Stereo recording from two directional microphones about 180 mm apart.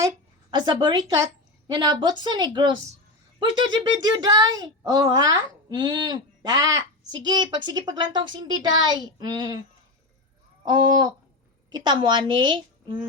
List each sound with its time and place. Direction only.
0.5 s speech: 25° right (ahead or behind)
10.7 s speech: 25° right (ahead or behind)